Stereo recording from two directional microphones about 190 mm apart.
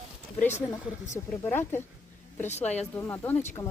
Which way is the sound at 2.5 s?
35° left (ahead or behind).